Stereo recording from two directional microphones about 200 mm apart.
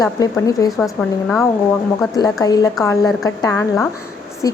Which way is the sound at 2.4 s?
20° left (ahead or behind).